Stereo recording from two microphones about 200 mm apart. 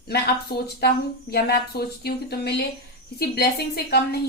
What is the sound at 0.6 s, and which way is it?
A woman's voice, 50° left (ahead or behind).